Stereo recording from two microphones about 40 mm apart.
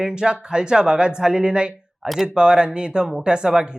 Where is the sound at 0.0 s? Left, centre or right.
Right.